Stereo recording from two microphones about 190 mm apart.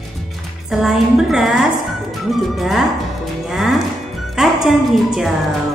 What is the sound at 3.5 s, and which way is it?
Music, centre (ahead or behind).